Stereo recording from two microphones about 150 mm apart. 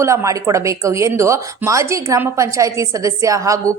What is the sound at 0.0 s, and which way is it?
Speech, 20° right (ahead or behind).